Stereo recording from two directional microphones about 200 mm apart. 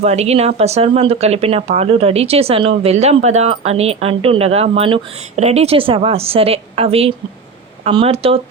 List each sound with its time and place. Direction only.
0.0 s a woman's voice: 30° right (ahead or behind)